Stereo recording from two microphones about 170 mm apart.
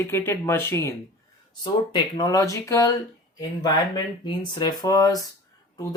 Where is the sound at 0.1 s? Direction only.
15° left (ahead or behind).